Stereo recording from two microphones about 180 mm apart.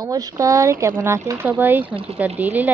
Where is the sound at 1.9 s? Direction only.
35° right (ahead or behind).